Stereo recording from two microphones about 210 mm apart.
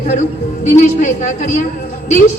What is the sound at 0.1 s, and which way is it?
A woman's voice, 35° left (ahead or behind).